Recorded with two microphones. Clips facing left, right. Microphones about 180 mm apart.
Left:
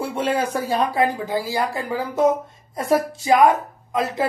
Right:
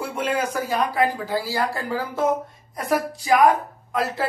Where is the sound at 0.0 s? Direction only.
30° left (ahead or behind).